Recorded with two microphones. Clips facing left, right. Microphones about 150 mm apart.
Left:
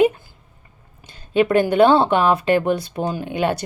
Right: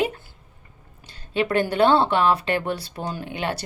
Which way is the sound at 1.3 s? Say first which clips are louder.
Left 6 dB; 20° left (ahead or behind).